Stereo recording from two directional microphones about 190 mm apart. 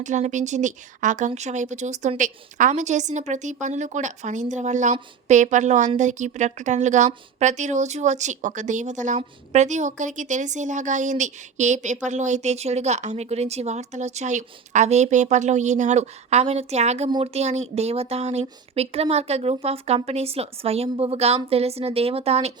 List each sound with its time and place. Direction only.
0.0 s speech: 40° right (ahead or behind)